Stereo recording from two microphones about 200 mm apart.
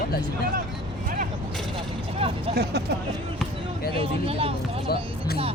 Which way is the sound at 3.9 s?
30° right (ahead or behind).